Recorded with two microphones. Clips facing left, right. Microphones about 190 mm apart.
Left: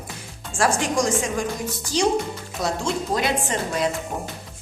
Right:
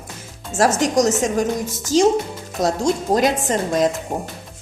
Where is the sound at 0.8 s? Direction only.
40° right (ahead or behind).